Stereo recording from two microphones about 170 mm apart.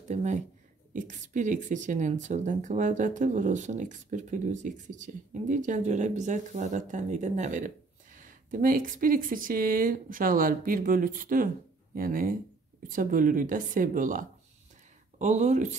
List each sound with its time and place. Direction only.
0.1 s speech: 45° right (ahead or behind)